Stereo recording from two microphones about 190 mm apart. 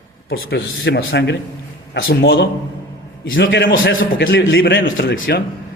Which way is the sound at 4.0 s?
55° left (ahead or behind).